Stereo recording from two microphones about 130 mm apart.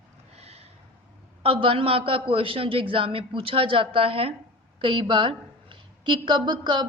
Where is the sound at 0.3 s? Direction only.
50° right (ahead or behind).